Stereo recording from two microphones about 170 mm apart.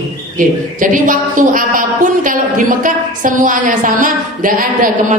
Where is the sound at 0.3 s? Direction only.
50° right (ahead or behind).